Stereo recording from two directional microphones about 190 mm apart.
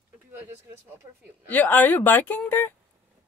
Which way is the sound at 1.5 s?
10° left (ahead or behind).